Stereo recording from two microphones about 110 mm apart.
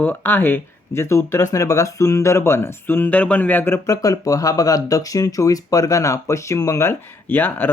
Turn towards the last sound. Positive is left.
turn(degrees=20)  # may be behind; listen again after turning